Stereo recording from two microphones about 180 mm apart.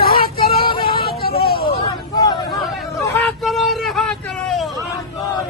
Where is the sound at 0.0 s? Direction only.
55° left (ahead or behind).